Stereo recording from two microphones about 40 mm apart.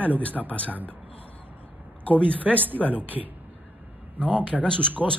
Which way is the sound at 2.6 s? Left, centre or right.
Right.